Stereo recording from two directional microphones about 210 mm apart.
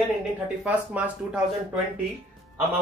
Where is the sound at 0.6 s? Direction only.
5° right (ahead or behind).